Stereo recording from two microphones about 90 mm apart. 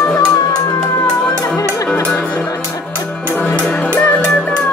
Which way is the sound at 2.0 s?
15° left (ahead or behind).